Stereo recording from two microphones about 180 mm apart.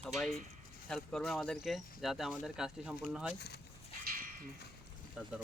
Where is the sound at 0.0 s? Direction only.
Centre (ahead or behind).